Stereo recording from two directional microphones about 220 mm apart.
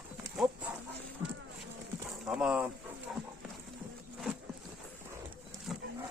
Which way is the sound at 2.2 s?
5° right (ahead or behind).